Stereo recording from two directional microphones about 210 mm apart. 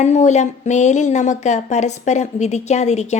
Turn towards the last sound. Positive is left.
turn(degrees=30)  # may be behind; listen again after turning